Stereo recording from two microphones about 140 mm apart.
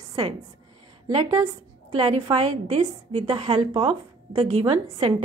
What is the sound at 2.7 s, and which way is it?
Speech, 45° right (ahead or behind).